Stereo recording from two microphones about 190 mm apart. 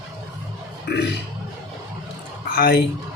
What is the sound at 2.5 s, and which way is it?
Speech, 60° left (ahead or behind).